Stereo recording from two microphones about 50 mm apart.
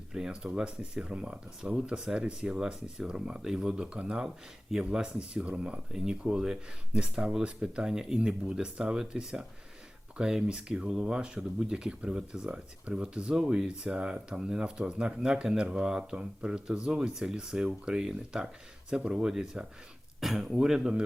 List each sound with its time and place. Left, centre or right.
0.1 s speech: centre
5.9 s speech: centre